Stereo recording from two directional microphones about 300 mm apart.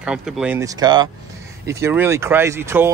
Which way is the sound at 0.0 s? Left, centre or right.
Centre.